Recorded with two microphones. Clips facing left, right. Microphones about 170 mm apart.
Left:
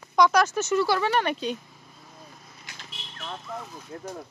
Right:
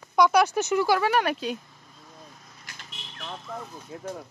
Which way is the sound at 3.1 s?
5° right (ahead or behind).